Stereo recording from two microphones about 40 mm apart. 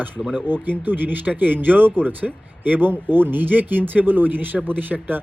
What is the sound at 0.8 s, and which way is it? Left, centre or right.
Speech, right.